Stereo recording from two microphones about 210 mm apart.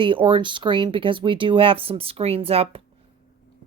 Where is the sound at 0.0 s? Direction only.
25° right (ahead or behind).